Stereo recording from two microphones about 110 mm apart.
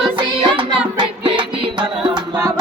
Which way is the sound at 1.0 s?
45° right (ahead or behind).